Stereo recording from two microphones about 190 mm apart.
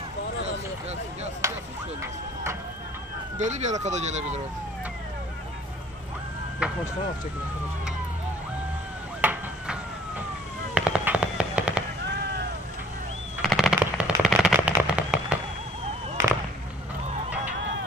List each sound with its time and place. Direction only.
1.4 s chop: 15° right (ahead or behind)
3.3 s speech: 40° right (ahead or behind)
6.6 s a sound: 5° right (ahead or behind)
9.2 s chop: 10° right (ahead or behind)
10.7 s fireworks: 5° right (ahead or behind)
13.4 s machine gun: centre (ahead or behind)
13.7 s firecracker: 5° right (ahead or behind)